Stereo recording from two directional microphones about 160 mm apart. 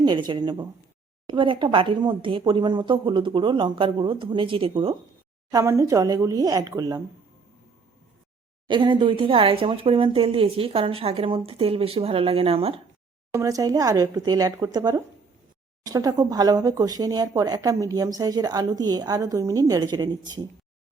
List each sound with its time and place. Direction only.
0.0 s speech: 30° right (ahead or behind)
5.5 s speech: 20° right (ahead or behind)
8.6 s speech: 30° right (ahead or behind)
13.3 s speech: 20° right (ahead or behind)